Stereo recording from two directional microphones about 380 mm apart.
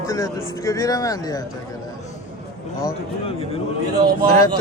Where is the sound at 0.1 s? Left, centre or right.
Centre.